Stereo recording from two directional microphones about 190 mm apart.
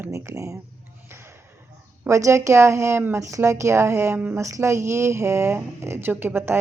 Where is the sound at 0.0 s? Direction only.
15° right (ahead or behind).